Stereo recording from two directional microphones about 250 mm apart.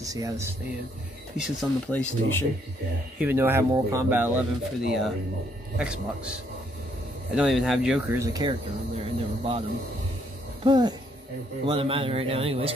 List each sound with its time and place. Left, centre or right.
0.0 s speech: centre
1.3 s speech: centre
3.2 s speech: centre
10.6 s a man's voice: centre